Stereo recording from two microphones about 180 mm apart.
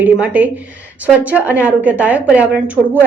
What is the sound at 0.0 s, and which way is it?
A woman's voice, 10° right (ahead or behind).